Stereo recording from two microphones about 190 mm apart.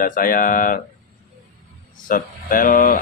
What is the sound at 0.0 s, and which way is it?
Speech, 45° left (ahead or behind).